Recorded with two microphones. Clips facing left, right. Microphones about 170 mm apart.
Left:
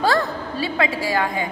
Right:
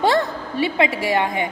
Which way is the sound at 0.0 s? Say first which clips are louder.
Right 2 dB; 25° right (ahead or behind).